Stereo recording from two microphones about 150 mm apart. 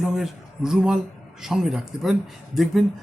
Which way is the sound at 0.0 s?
5° right (ahead or behind).